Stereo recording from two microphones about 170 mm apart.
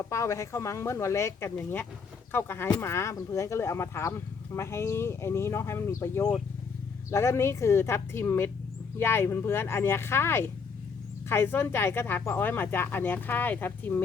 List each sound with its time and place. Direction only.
0.0 s speech: 15° left (ahead or behind)